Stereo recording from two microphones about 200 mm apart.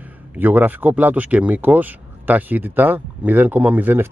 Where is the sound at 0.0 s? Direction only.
10° right (ahead or behind).